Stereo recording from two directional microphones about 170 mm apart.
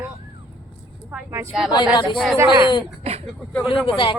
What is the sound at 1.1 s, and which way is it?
Speech, 15° right (ahead or behind).